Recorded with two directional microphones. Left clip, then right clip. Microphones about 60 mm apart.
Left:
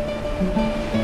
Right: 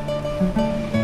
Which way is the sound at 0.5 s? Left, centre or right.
Centre.